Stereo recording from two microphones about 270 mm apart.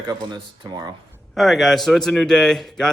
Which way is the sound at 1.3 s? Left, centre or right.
Centre.